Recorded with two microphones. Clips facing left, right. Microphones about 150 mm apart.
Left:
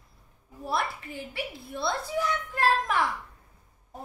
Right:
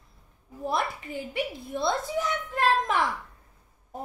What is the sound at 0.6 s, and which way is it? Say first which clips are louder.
A child's voice: right 2 dB; 20° right (ahead or behind).